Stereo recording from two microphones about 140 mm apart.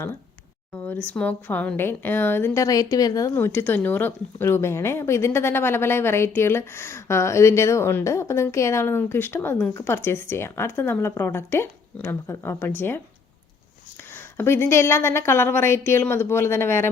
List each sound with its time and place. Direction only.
1.0 s speech: 10° left (ahead or behind); by 3.3 s 25° left (ahead or behind)
3.3 s speech: 15° left (ahead or behind)
14.1 s speech: 15° left (ahead or behind)